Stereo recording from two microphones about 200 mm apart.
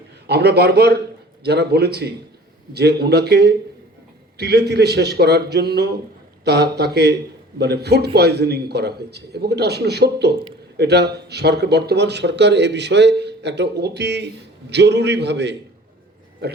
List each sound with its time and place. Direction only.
0.3 s a man's voice: 55° right (ahead or behind)